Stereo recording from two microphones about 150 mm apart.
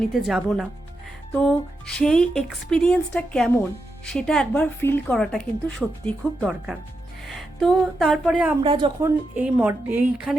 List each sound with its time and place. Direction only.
0.0 s speech: centre (ahead or behind)
2.0 s speech: 5° left (ahead or behind)
8.6 s a woman's voice: 35° right (ahead or behind)
9.0 s a woman's voice: 20° right (ahead or behind)
9.4 s a woman's voice: 10° right (ahead or behind)